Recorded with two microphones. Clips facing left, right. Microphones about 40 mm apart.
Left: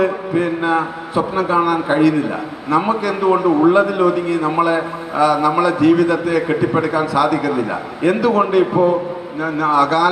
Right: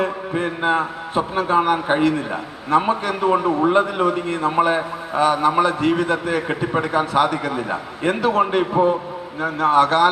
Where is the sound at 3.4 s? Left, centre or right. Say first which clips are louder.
Left 4 dB; right.